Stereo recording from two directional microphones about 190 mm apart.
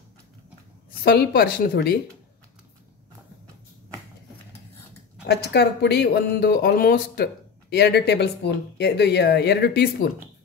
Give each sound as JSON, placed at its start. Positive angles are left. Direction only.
{"t": 1.0, "sound": "speech", "side_deg": 60}
{"t": 5.3, "sound": "speech", "side_deg": 60}